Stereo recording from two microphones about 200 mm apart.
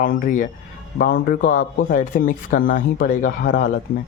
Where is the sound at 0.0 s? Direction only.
40° left (ahead or behind).